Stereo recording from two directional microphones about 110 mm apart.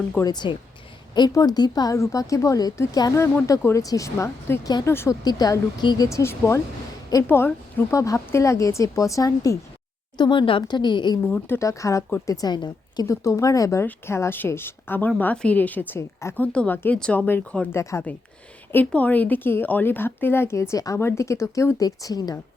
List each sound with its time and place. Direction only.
0.3 s a woman's voice: 40° left (ahead or behind); by 5.1 s 20° left (ahead or behind)
5.2 s speech: 35° left (ahead or behind)
6.1 s a woman's voice: 25° left (ahead or behind)
10.2 s a woman's voice: 45° left (ahead or behind)
11.3 s a woman's voice: 20° left (ahead or behind); by 13.1 s 40° left (ahead or behind)
13.1 s a woman's voice: 30° left (ahead or behind); by 17.7 s 15° left (ahead or behind)
18.9 s a woman's voice: 15° left (ahead or behind); by 22.4 s 35° left (ahead or behind)